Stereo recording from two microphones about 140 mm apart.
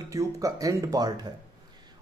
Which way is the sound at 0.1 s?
25° right (ahead or behind).